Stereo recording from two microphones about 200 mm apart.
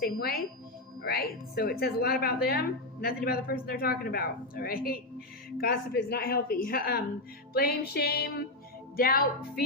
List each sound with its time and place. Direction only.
0.0 s a woman's voice: 50° left (ahead or behind)